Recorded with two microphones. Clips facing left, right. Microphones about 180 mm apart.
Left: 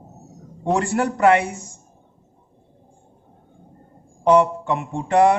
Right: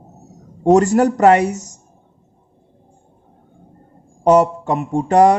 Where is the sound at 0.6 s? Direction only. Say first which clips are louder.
Right 9 dB; 40° right (ahead or behind).